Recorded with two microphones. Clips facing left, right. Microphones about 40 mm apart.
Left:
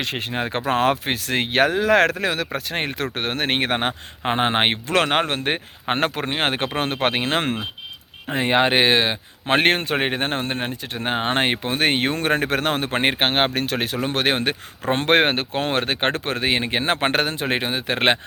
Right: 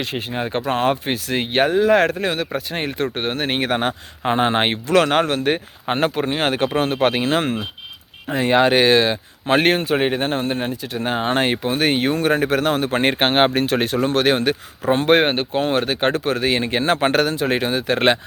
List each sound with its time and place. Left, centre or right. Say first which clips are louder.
0.0 s speech: right 1 dB; left
2.6 s speech: right 2 dB; left
3.7 s speech: right 2 dB; left
8.3 s speech: right 3 dB; left
9.5 s speech: right 2 dB; left
13.1 s speech: right 4 dB; centre
14.1 s speech: right 3 dB; left
14.8 s speech: right 2 dB; left